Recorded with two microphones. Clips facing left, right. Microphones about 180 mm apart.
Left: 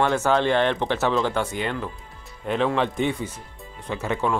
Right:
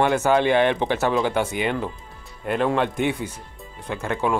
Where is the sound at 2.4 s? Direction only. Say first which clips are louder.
Right 1 dB; 5° right (ahead or behind).